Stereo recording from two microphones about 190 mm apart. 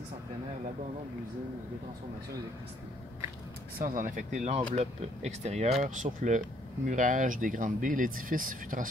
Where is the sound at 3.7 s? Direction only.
45° right (ahead or behind).